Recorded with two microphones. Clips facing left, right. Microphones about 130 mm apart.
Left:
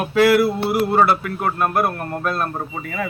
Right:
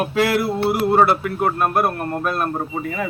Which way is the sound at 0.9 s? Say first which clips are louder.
Right 1 dB; 20° right (ahead or behind).